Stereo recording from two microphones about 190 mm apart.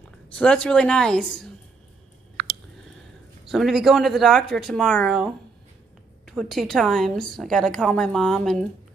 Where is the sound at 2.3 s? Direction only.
60° right (ahead or behind).